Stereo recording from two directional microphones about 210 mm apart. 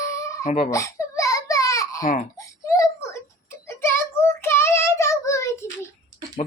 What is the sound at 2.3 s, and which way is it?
Whimper, 15° left (ahead or behind).